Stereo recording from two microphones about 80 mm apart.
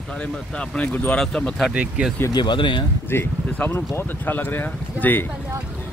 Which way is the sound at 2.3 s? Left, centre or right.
Left.